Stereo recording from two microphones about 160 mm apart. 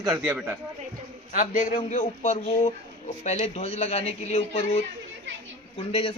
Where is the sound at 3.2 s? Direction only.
40° left (ahead or behind).